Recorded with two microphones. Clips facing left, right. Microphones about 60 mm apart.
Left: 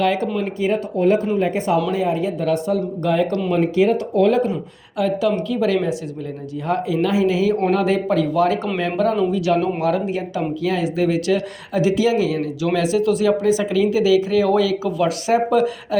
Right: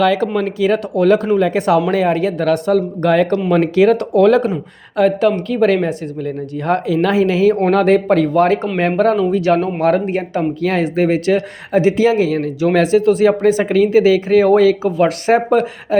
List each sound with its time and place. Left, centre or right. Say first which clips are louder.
0.2 s speech: right 5 dB; right
1.3 s speech: right 5 dB; right
3.5 s speech: right 5 dB; right
4.9 s speech: right 5 dB; right
9.8 s speech: right 5 dB; right
15.9 s a sound: right 6 dB; right